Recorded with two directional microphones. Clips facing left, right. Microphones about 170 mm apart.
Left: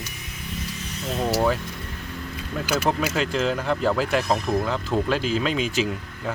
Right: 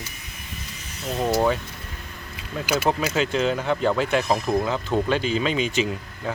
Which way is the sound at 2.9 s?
Centre (ahead or behind).